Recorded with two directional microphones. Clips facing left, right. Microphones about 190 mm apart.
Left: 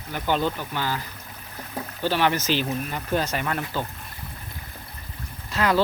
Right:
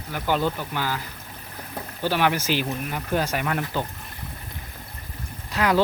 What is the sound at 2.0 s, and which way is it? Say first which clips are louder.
Speech: even; 10° right (ahead or behind).